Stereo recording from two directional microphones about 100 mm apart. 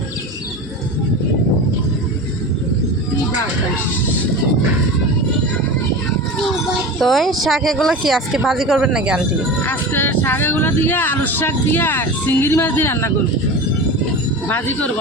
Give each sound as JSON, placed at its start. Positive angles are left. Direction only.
{"t": 7.0, "sound": "speech", "side_deg": 0}
{"t": 9.6, "sound": "speech", "side_deg": 20}
{"t": 14.4, "sound": "speech", "side_deg": 20}